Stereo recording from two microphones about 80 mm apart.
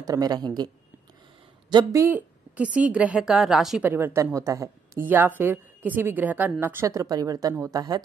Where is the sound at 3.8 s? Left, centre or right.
Right.